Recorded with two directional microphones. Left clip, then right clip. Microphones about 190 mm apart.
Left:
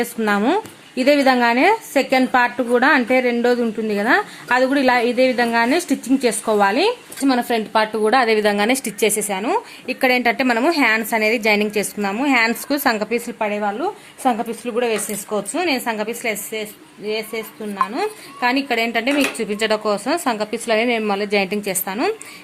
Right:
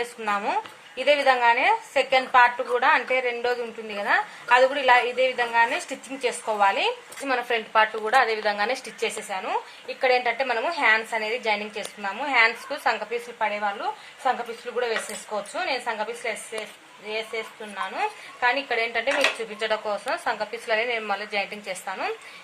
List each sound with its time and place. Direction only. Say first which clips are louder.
0.2 s speech: left 7 dB; 60° left (ahead or behind)
14.6 s speech: left 6 dB; 70° left (ahead or behind)